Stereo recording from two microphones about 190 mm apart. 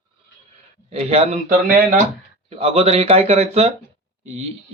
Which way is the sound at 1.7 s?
50° right (ahead or behind).